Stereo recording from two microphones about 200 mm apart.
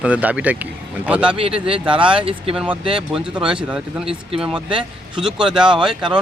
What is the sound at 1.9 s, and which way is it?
Speech, 25° right (ahead or behind).